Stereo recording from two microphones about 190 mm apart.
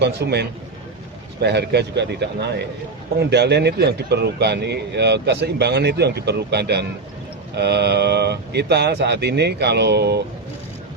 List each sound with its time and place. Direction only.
0.0 s speech: 60° right (ahead or behind)